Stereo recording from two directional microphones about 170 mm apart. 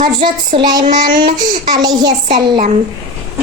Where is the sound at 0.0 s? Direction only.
25° right (ahead or behind).